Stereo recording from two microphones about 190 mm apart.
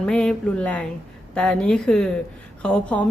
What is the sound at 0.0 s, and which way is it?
A woman's voice, 5° left (ahead or behind).